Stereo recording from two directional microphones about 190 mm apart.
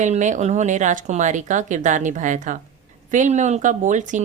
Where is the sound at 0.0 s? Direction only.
40° right (ahead or behind).